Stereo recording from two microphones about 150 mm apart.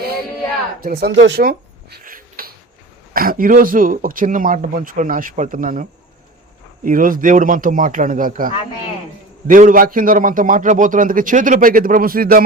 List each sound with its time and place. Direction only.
0.8 s a man's voice: 85° right